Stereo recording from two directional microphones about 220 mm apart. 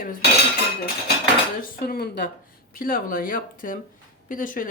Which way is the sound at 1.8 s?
45° left (ahead or behind).